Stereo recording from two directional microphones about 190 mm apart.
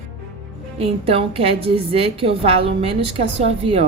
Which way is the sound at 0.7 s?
30° right (ahead or behind).